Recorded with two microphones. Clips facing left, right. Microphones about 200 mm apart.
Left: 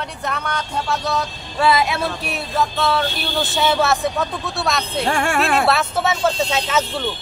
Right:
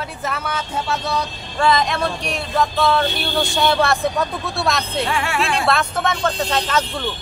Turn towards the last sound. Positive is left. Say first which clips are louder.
# even
turn(degrees=5)  # may be behind; listen again after turning